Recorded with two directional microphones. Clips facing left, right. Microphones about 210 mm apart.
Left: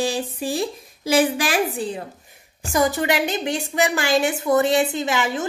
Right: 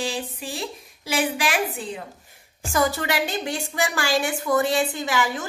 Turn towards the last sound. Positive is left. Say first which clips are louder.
# left 2 dB
turn(degrees=25)  # may be behind; listen again after turning